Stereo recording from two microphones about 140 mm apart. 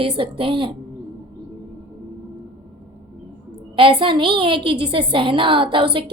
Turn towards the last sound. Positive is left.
turn(degrees=-35)  # may be behind; listen again after turning